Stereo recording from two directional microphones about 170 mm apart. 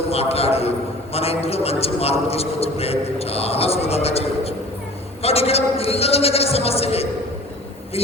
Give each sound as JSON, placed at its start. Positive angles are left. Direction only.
{"t": 0.1, "sound": "a man's voice", "side_deg": 35}